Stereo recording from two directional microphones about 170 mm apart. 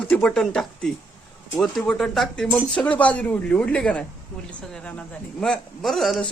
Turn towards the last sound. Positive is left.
turn(degrees=0)  # may be behind; listen again after turning